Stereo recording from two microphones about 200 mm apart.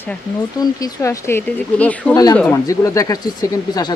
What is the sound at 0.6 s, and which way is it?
Speech, 15° left (ahead or behind).